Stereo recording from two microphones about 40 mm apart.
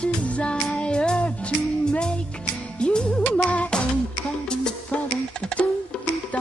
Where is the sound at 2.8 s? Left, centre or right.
Left.